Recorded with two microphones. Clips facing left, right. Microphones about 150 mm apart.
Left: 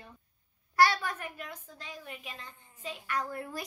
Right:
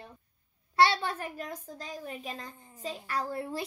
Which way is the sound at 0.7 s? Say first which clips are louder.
Right 1 dB; 25° right (ahead or behind).